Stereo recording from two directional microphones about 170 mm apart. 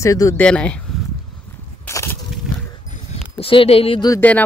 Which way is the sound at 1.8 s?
15° left (ahead or behind).